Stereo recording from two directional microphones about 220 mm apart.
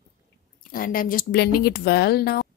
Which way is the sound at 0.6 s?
40° left (ahead or behind).